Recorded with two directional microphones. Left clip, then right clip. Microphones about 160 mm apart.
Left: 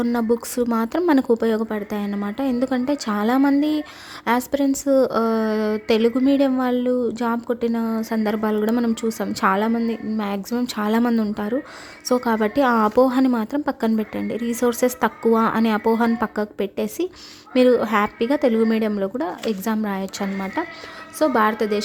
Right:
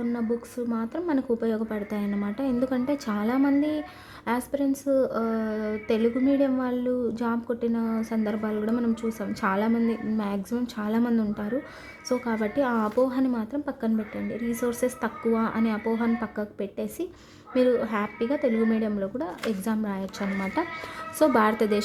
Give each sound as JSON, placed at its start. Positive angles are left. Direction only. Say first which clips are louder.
{"t": 0.0, "sound": "a woman's voice", "louder": "left 8 dB", "side_deg": 40}
{"t": 21.2, "sound": "a woman's voice", "louder": "left 3 dB", "side_deg": 15}